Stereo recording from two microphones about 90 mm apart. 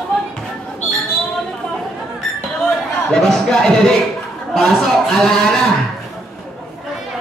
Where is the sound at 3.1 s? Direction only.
5° left (ahead or behind).